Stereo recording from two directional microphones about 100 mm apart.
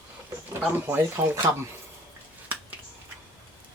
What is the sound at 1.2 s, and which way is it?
Speech, 25° right (ahead or behind).